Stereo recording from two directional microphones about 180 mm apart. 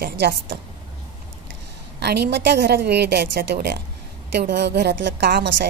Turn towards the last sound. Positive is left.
turn(degrees=-70)  # may be behind; listen again after turning